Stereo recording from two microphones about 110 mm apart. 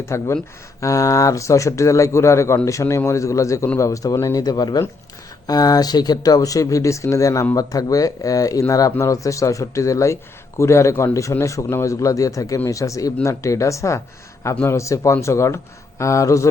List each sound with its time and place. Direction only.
0.0 s speech: 25° left (ahead or behind)